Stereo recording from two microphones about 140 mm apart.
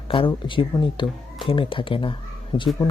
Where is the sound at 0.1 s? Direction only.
35° left (ahead or behind).